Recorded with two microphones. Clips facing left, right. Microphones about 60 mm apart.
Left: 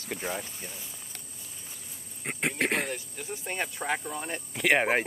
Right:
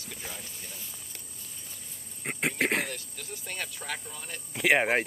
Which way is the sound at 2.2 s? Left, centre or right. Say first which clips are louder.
Even; centre.